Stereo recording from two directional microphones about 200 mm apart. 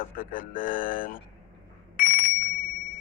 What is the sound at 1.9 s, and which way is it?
Bicycle bell, 45° left (ahead or behind).